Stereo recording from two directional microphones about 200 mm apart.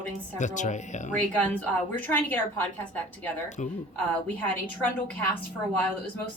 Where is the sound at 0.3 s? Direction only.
40° left (ahead or behind).